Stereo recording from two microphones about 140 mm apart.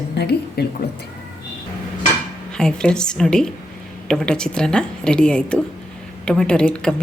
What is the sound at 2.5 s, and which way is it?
A woman's voice, 5° left (ahead or behind).